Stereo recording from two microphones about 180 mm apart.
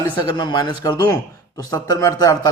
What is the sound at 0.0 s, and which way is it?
Speech, 25° left (ahead or behind).